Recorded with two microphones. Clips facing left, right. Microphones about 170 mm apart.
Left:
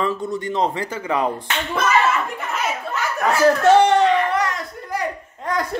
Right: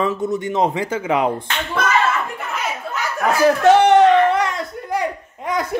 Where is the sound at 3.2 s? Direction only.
15° right (ahead or behind).